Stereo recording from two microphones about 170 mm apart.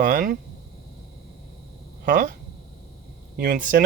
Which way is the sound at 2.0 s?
55° right (ahead or behind).